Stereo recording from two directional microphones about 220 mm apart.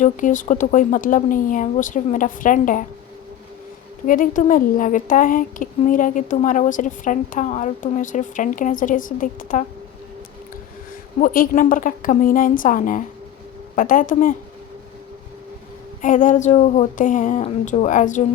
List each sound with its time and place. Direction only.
0.0 s a woman's voice: 35° left (ahead or behind)
4.0 s a woman's voice: 40° left (ahead or behind)
11.2 s a woman's voice: 40° left (ahead or behind)
16.0 s a woman's voice: 35° left (ahead or behind)